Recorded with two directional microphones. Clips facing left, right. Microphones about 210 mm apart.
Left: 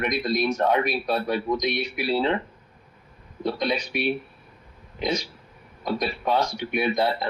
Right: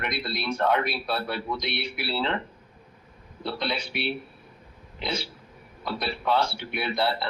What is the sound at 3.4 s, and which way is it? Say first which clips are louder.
Speech: left 5 dB; 15° left (ahead or behind).